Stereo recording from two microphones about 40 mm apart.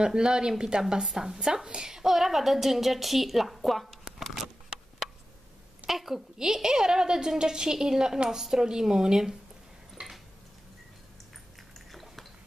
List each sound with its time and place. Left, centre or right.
0.0 s a woman's voice: centre
2.0 s a woman's voice: centre
5.9 s a woman's voice: centre
11.9 s dishes: centre